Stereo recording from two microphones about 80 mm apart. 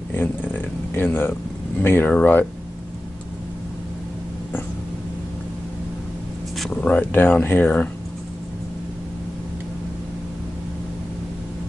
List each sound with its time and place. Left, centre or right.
0.1 s a sound: left
1.8 s speech: left
6.7 s speech: centre